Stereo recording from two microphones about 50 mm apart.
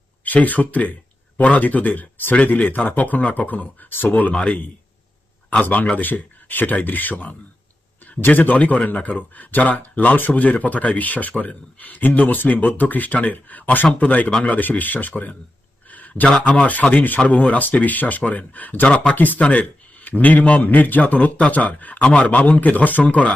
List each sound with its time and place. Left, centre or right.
0.3 s speech: left
14.5 s speech: left
15.9 s a sound: left
16.4 s speech: left
18.9 s speech: left
19.1 s speech: left